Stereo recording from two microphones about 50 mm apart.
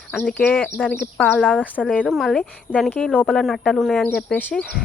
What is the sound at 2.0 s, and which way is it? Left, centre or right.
Speech, centre.